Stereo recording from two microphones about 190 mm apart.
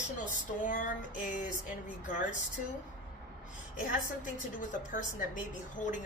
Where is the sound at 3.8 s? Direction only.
45° left (ahead or behind).